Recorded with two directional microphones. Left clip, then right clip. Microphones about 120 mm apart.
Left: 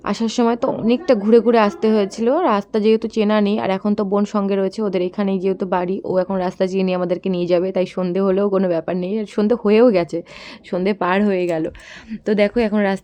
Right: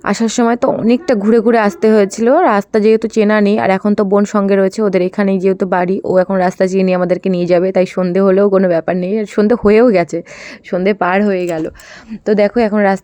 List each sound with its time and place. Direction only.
0.0 s a woman's voice: 50° right (ahead or behind)
10.7 s speech: 25° right (ahead or behind)